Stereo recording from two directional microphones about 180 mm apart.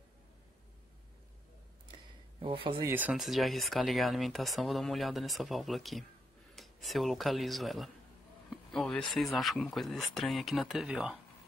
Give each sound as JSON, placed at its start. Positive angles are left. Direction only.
{"t": 2.4, "sound": "speech", "side_deg": -30}
{"t": 2.9, "sound": "speech", "side_deg": -10}
{"t": 8.5, "sound": "a sound", "side_deg": 5}
{"t": 9.1, "sound": "speech", "side_deg": 0}